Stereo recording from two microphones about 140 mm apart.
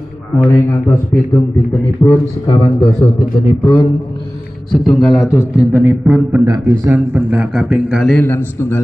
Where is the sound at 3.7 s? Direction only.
35° left (ahead or behind).